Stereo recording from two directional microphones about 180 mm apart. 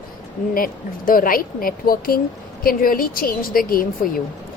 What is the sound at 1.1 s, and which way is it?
A woman's voice, 50° left (ahead or behind).